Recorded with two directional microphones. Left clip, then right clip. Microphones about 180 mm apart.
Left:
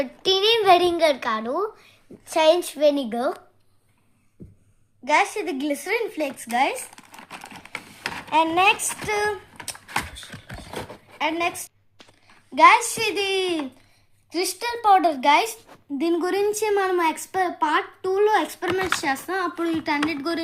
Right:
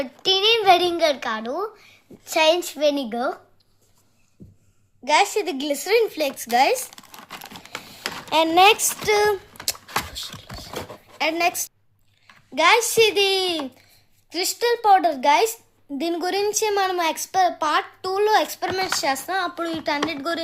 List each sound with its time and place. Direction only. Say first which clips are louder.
0.0 s a child's voice: right 1 dB; 5° left (ahead or behind)
4.4 s a sound: left 2 dB; centre (ahead or behind)
5.0 s a woman's voice: right 2 dB; 30° right (ahead or behind)
7.1 s crumpling: right 1 dB; 15° right (ahead or behind)
8.3 s a woman's voice: right 3 dB; 45° right (ahead or behind)
11.2 s a woman's voice: right 3 dB; 45° right (ahead or behind)
12.5 s a child's voice: left 1 dB; 25° right (ahead or behind)
14.3 s a child's voice: right 4 dB; 20° right (ahead or behind)
16.0 s a child's voice: left 1 dB; 30° right (ahead or behind)
19.0 s a child's voice: right 2 dB; 25° right (ahead or behind)